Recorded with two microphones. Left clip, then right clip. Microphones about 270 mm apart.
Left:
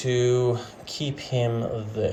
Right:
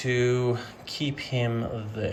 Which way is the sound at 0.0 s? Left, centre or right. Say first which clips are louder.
Left 3 dB; centre.